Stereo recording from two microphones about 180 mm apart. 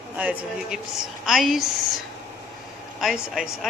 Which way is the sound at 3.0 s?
Centre (ahead or behind).